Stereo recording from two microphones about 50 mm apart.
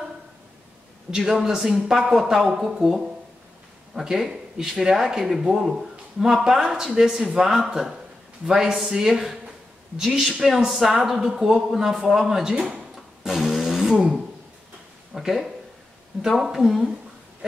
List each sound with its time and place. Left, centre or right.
1.1 s speech: centre
12.5 s speech: centre
13.2 s a sound: centre
13.9 s speech: centre
15.1 s speech: centre